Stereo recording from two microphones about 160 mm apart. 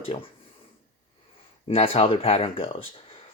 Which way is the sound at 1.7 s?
40° left (ahead or behind).